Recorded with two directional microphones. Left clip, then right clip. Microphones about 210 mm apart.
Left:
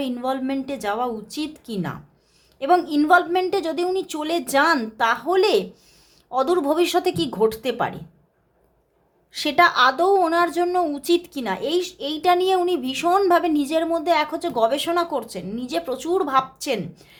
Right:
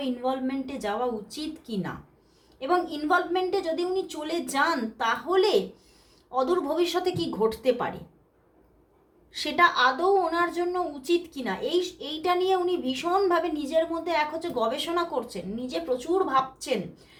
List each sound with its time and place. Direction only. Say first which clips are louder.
0.0 s a woman's voice: left 4 dB; 45° left (ahead or behind)
9.3 s a woman's voice: left 5 dB; 45° left (ahead or behind)